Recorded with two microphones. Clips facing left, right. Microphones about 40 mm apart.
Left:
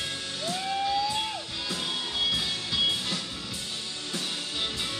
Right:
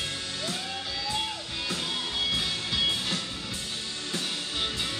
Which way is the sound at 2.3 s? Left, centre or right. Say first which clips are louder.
Even; right.